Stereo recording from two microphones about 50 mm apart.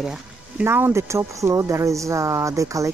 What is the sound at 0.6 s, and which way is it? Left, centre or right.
Speech, right.